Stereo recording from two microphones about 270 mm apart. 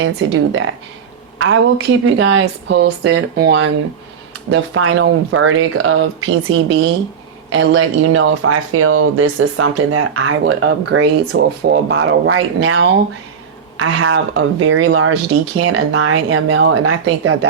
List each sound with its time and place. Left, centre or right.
0.0 s speech: right
7.5 s speech: right